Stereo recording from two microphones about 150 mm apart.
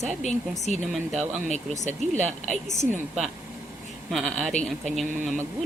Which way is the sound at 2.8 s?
50° right (ahead or behind).